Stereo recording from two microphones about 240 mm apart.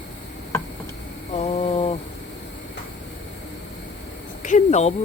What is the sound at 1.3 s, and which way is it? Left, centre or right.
Mantra, left.